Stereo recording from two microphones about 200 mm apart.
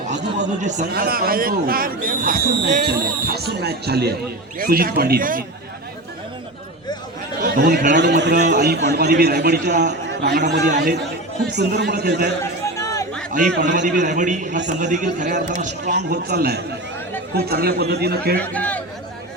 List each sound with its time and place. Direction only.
0.3 s a man's voice: 40° right (ahead or behind)
0.9 s speech: 50° right (ahead or behind)
7.3 s a man's voice: 45° right (ahead or behind)
13.8 s a man's voice: 40° right (ahead or behind)
15.9 s speech: 55° right (ahead or behind)
18.3 s a man's voice: 5° left (ahead or behind)